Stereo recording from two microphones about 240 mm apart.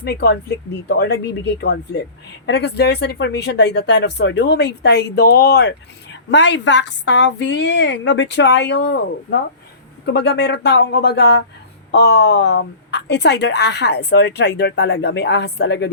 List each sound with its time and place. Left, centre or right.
0.0 s a woman's voice: left